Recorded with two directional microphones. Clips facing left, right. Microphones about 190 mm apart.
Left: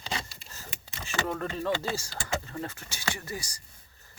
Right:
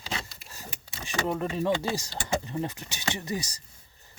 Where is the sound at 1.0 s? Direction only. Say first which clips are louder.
Right 3 dB; 15° right (ahead or behind).